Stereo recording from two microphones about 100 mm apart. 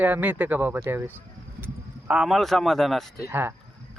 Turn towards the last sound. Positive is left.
turn(degrees=-20)  # may be behind; listen again after turning